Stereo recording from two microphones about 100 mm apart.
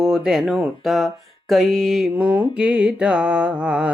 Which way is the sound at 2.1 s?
15° right (ahead or behind).